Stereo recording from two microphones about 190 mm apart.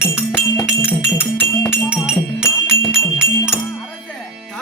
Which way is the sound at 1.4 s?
10° left (ahead or behind).